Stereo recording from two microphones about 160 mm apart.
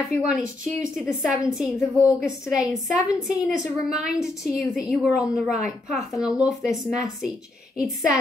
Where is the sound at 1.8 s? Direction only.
20° left (ahead or behind).